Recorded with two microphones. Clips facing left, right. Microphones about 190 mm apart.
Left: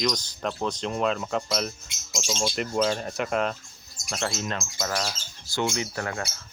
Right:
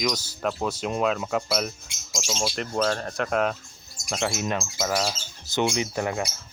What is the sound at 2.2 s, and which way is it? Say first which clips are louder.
Speech: even; 5° right (ahead or behind).